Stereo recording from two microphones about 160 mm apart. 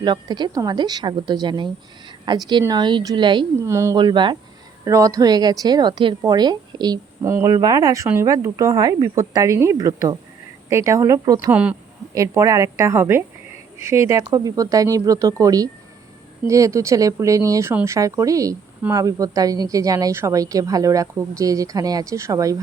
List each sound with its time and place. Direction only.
0.0 s speech: 25° right (ahead or behind)
3.7 s speech: 15° right (ahead or behind)
3.9 s speech: 30° right (ahead or behind)
11.5 s speech: 5° right (ahead or behind)
12.1 s speech: 20° right (ahead or behind)